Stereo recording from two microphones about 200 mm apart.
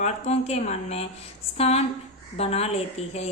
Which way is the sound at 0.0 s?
30° left (ahead or behind).